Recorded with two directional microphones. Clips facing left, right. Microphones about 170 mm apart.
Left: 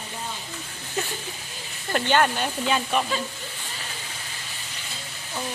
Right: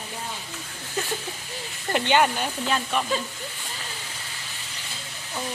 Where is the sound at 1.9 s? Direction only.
15° right (ahead or behind).